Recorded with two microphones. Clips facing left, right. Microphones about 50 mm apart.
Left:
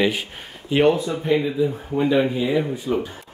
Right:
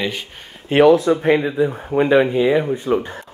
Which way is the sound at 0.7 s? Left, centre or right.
Right.